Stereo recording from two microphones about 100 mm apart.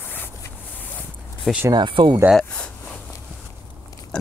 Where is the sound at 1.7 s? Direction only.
50° right (ahead or behind).